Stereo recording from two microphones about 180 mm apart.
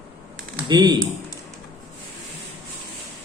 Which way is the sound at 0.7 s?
25° right (ahead or behind).